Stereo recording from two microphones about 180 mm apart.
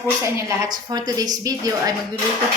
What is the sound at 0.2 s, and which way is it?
Speech, 15° right (ahead or behind).